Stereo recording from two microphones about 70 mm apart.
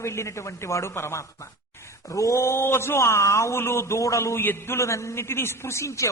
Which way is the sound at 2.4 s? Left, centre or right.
Left.